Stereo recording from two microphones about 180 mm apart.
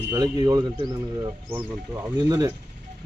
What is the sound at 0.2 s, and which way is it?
Speech, 20° right (ahead or behind).